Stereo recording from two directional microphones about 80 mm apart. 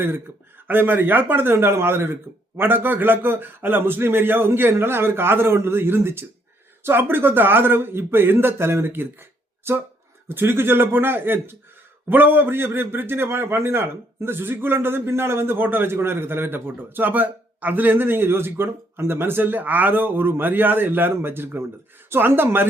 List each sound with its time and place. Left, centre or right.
0.7 s a man's voice: right